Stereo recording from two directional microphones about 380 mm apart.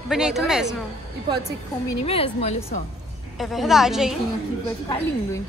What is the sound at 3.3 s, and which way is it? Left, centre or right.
Speech, centre.